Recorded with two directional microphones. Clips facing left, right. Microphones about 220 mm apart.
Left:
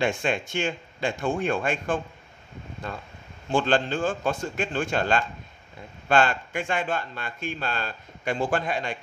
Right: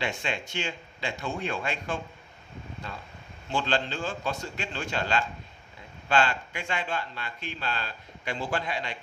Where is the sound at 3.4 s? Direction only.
50° left (ahead or behind).